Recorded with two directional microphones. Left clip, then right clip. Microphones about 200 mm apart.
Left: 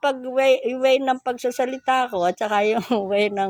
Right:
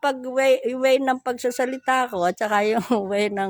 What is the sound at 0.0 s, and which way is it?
A woman's voice, 20° right (ahead or behind).